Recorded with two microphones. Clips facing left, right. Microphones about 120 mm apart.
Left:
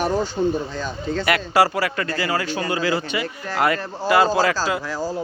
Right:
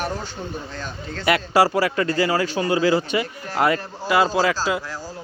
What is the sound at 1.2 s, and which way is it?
A man's voice, 25° right (ahead or behind).